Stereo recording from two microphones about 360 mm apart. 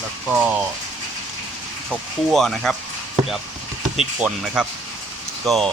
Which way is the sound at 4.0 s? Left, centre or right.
Centre.